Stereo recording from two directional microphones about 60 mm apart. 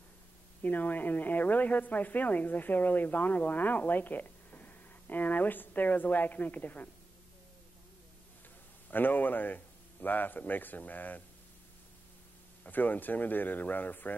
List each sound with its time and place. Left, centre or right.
0.6 s a woman's voice: left
8.9 s a man's voice: left
12.6 s a man's voice: left